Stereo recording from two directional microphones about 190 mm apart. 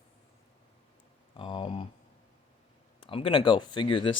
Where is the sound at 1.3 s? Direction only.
25° left (ahead or behind).